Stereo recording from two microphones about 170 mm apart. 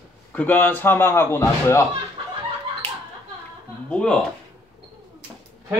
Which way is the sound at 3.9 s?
5° left (ahead or behind).